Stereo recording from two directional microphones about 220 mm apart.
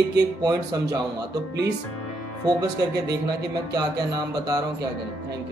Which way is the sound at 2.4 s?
15° right (ahead or behind).